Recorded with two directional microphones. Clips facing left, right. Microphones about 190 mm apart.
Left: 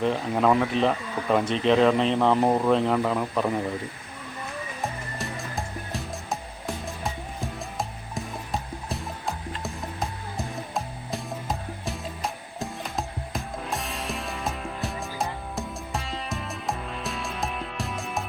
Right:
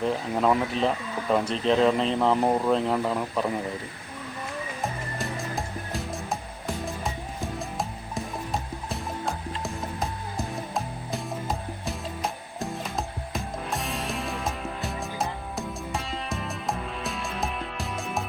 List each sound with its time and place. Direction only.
0.0 s speech: centre (ahead or behind)
4.8 s music: centre (ahead or behind)
8.9 s music: centre (ahead or behind)